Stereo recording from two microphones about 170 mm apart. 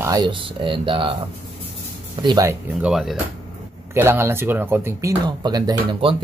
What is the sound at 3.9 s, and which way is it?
Speech, 15° right (ahead or behind).